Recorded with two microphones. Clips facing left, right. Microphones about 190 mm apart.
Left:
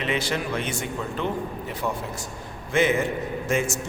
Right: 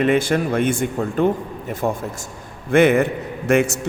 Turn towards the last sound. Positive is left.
turn(degrees=-65)  # may be behind; listen again after turning